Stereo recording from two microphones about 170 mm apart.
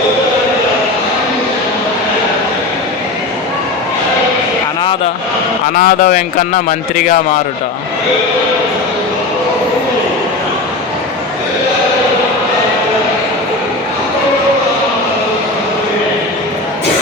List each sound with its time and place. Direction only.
5.7 s speech: 50° left (ahead or behind)